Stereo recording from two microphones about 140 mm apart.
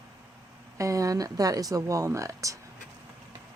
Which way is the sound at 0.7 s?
20° right (ahead or behind).